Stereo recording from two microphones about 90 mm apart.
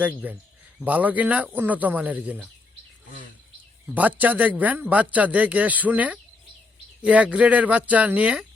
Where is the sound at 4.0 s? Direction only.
20° right (ahead or behind).